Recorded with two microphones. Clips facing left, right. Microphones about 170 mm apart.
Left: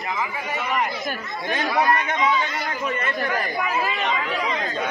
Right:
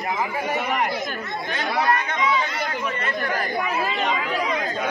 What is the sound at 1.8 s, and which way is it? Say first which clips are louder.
Speech: left 1 dB; 20° left (ahead or behind).